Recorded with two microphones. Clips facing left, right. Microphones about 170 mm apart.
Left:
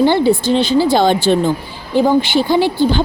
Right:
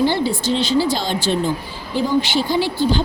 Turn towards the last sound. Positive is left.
turn(degrees=60)  # may be behind; listen again after turning